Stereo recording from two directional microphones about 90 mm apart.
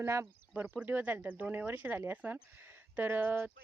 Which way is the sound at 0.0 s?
35° right (ahead or behind).